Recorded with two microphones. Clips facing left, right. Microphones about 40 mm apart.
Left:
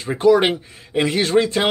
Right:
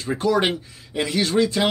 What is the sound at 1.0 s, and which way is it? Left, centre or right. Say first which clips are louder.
Speech: left 3 dB; left.